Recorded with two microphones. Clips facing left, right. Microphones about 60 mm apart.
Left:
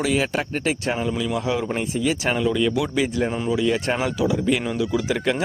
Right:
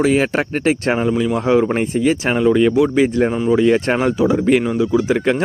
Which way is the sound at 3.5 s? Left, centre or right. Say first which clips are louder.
Right 8 dB; right.